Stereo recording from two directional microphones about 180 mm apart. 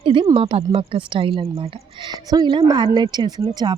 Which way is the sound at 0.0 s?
30° right (ahead or behind).